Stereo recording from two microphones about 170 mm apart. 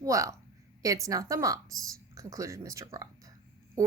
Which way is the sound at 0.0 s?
20° right (ahead or behind).